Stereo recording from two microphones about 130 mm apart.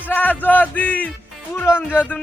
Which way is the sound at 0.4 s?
10° left (ahead or behind).